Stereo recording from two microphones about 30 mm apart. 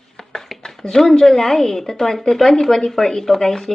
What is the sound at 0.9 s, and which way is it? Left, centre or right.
A woman's voice, centre.